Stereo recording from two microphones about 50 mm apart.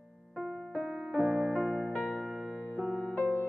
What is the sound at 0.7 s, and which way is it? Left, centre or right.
Music, centre.